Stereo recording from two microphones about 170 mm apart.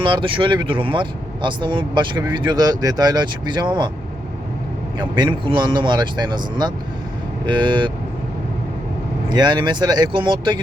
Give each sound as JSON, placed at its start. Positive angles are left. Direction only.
{"t": 0.0, "sound": "speech", "side_deg": -30}
{"t": 4.9, "sound": "speech", "side_deg": -25}
{"t": 9.3, "sound": "speech", "side_deg": -25}